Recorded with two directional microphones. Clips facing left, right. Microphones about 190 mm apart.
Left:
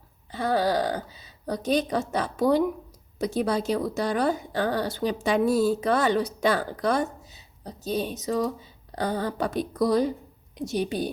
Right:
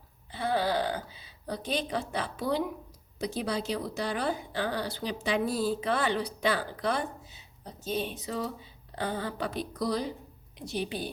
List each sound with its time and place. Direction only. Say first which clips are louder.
0.3 s a woman's voice: left 5 dB; 40° left (ahead or behind)